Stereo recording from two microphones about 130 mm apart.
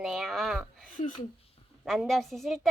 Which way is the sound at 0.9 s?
90° left.